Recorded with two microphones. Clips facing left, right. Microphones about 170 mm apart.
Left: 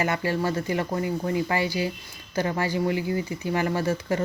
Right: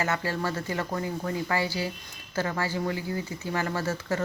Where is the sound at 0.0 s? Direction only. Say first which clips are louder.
Left 4 dB; 15° left (ahead or behind).